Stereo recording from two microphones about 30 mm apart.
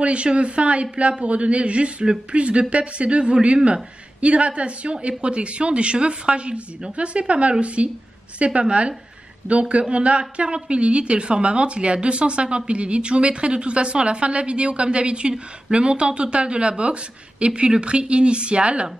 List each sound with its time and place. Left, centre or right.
0.0 s speech: right